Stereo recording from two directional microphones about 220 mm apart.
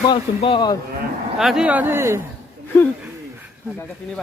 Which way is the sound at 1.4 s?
Centre (ahead or behind).